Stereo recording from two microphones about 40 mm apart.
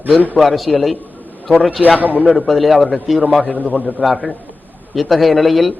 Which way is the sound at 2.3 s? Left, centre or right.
Centre.